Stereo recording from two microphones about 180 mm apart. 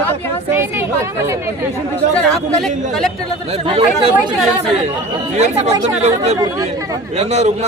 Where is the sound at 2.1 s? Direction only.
5° left (ahead or behind).